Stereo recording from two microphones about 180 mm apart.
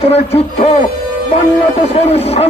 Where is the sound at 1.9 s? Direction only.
35° left (ahead or behind).